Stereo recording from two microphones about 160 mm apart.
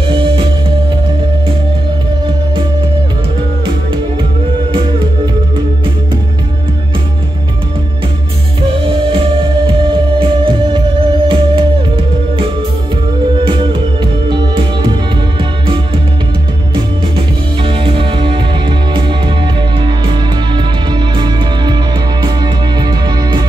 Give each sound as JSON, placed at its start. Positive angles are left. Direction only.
{"t": 0.1, "sound": "music", "side_deg": -30}
{"t": 4.7, "sound": "music", "side_deg": -30}
{"t": 8.8, "sound": "music", "side_deg": -30}
{"t": 13.4, "sound": "music", "side_deg": -30}
{"t": 17.6, "sound": "music", "side_deg": -30}